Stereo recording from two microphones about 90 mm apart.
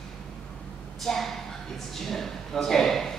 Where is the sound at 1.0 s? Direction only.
5° left (ahead or behind).